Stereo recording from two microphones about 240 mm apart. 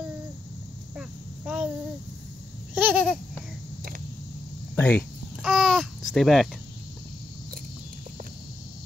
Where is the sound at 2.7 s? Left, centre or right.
Centre.